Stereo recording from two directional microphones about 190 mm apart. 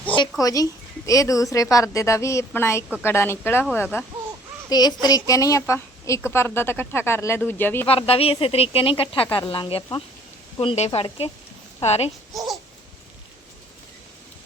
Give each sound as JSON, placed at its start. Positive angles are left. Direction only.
{"t": 0.2, "sound": "a woman's voice", "side_deg": 20}
{"t": 4.7, "sound": "a woman's voice", "side_deg": 20}
{"t": 7.9, "sound": "speech", "side_deg": 30}